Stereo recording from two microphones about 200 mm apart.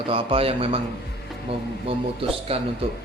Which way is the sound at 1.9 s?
30° right (ahead or behind).